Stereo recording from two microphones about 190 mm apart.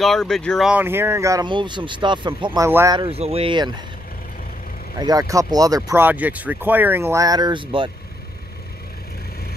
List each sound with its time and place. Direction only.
0.0 s speech: centre (ahead or behind); by 3.1 s 15° right (ahead or behind)
3.1 s speech: 30° right (ahead or behind)
4.9 s speech: 20° right (ahead or behind)